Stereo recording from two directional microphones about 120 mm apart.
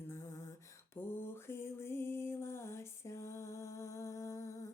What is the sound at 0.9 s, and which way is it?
Mantra, 20° left (ahead or behind).